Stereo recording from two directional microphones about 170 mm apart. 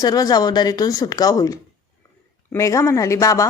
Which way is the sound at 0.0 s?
20° left (ahead or behind).